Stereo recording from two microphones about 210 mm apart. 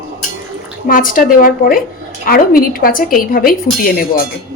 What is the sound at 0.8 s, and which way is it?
A woman's voice, 40° left (ahead or behind).